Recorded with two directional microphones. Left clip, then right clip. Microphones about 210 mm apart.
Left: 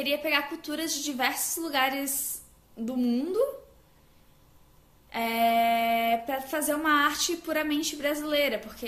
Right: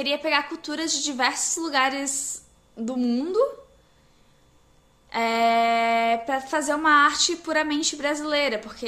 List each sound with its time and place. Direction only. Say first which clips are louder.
0.0 s speech: right 3 dB; 15° right (ahead or behind)
5.1 s speech: right 4 dB; 15° right (ahead or behind)